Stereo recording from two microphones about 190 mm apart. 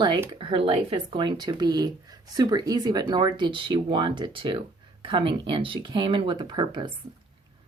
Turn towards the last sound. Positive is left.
turn(degrees=-25)  # may be behind; listen again after turning